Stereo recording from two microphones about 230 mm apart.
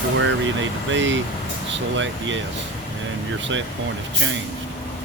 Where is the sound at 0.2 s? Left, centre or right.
Right.